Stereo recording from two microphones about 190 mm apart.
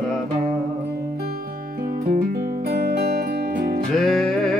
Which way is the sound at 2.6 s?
55° right (ahead or behind).